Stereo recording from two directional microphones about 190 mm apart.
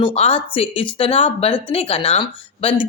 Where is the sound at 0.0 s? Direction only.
30° left (ahead or behind).